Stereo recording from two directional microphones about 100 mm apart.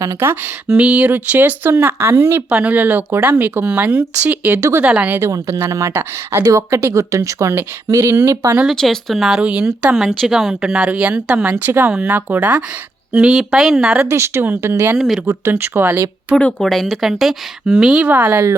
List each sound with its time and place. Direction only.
0.2 s speech: 20° right (ahead or behind)
5.3 s speech: 30° right (ahead or behind)
8.7 s a woman's voice: 5° left (ahead or behind); by 11.9 s 20° right (ahead or behind)
11.9 s a woman's voice: 10° right (ahead or behind)
14.1 s speech: 25° right (ahead or behind)
14.9 s a woman's voice: centre (ahead or behind)
15.3 s speech: 20° right (ahead or behind)
16.3 s a woman's voice: 10° left (ahead or behind); by 18.1 s 5° right (ahead or behind)
18.1 s speech: 20° right (ahead or behind)